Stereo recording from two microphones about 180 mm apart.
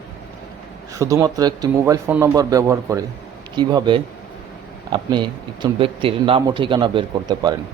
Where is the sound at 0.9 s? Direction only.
20° right (ahead or behind).